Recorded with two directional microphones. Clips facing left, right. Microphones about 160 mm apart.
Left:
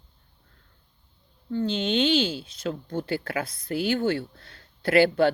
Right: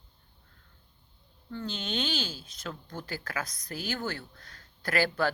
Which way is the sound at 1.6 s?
25° left (ahead or behind).